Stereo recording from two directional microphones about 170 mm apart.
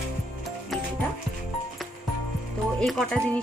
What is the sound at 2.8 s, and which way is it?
Speech, centre (ahead or behind).